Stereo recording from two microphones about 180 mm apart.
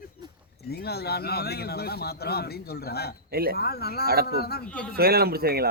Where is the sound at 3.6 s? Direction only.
60° left (ahead or behind).